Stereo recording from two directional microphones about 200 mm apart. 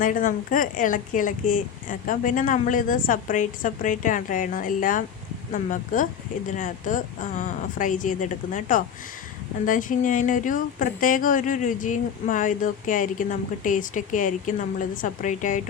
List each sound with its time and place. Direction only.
0.0 s a woman's voice: 40° left (ahead or behind)